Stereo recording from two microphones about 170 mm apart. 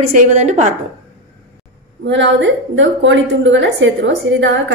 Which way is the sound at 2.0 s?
90° right.